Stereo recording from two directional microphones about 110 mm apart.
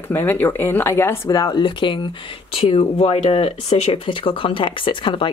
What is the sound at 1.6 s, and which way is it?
Speech, 45° left (ahead or behind).